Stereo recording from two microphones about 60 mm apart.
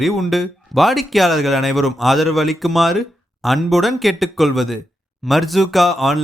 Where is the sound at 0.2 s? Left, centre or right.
Centre.